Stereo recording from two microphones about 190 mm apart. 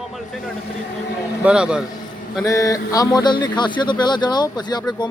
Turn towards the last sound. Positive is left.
turn(degrees=20)  # may be behind; listen again after turning